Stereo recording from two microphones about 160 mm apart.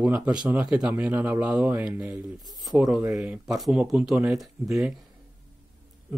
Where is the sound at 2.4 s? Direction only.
25° right (ahead or behind).